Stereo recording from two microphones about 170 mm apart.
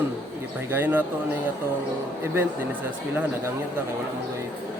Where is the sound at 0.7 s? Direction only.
10° right (ahead or behind).